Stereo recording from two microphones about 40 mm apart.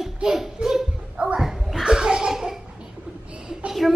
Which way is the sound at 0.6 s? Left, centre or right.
Centre.